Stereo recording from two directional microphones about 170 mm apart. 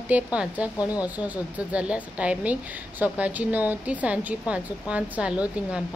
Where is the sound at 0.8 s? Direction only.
20° left (ahead or behind).